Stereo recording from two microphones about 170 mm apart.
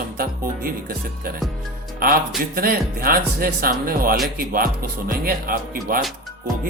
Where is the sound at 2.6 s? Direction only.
60° right (ahead or behind).